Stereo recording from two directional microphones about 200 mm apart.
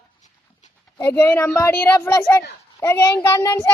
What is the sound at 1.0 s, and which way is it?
A child's voice, 10° left (ahead or behind).